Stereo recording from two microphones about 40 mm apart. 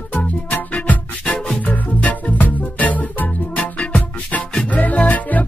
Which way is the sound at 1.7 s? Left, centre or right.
Left.